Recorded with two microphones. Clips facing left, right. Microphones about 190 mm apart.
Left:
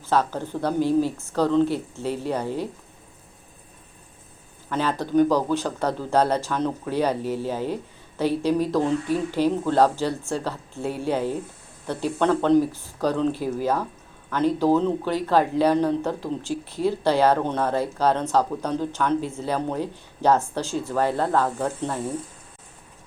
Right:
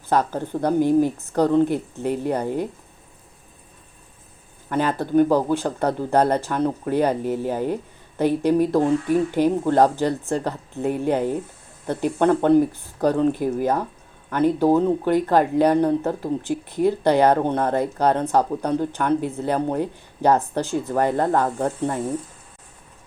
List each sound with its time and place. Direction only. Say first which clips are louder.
0.1 s speech: right 2 dB; 15° right (ahead or behind)
5.1 s speech: right 2 dB; 10° right (ahead or behind)